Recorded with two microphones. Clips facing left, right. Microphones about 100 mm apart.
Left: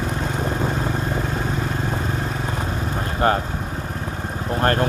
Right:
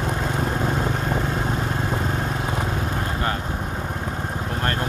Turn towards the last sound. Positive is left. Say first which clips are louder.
# left 6 dB
turn(degrees=35)  # may be behind; listen again after turning